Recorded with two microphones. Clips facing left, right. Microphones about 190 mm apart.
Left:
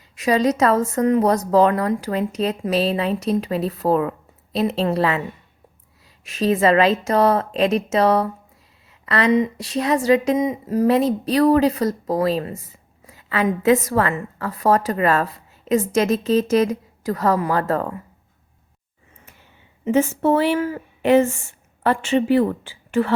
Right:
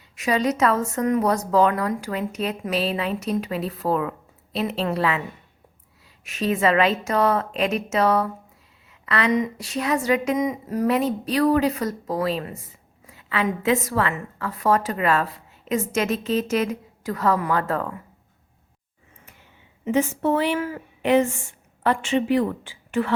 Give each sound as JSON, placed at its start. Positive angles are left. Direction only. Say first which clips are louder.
{"t": 0.2, "sound": "a woman's voice", "louder": "left 4 dB", "side_deg": 35}
{"t": 6.2, "sound": "a woman's voice", "louder": "left 4 dB", "side_deg": 35}
{"t": 19.8, "sound": "a woman's voice", "louder": "left 4 dB", "side_deg": 45}